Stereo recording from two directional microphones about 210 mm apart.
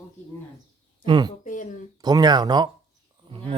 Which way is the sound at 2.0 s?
20° right (ahead or behind).